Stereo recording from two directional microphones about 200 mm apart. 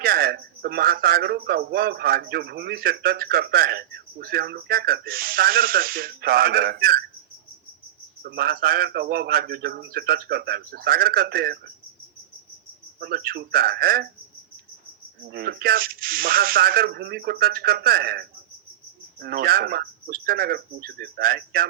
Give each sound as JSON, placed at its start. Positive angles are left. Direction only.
{"t": 0.0, "sound": "speech", "side_deg": -50}
{"t": 8.2, "sound": "speech", "side_deg": -50}
{"t": 13.0, "sound": "speech", "side_deg": -50}
{"t": 15.3, "sound": "speech", "side_deg": -50}